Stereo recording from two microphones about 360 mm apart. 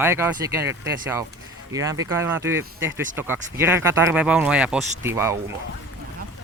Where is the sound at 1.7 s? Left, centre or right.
Centre.